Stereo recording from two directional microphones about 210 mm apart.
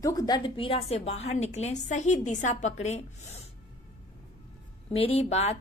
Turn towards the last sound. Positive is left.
turn(degrees=30)  # may be behind; listen again after turning